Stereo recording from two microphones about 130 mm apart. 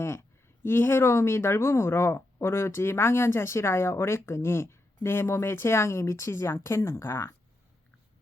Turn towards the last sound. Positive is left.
turn(degrees=20)  # may be behind; listen again after turning